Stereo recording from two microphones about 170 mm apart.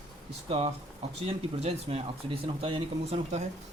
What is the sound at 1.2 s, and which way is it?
Speech, 35° right (ahead or behind).